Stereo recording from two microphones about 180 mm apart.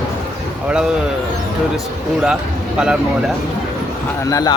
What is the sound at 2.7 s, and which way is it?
Speech, 5° right (ahead or behind).